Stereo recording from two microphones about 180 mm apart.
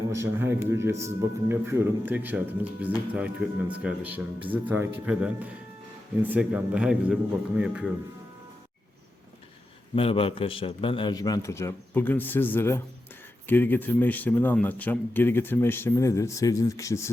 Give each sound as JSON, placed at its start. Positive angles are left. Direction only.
{"t": 0.1, "sound": "a man's voice", "side_deg": -15}
{"t": 9.9, "sound": "a man's voice", "side_deg": 30}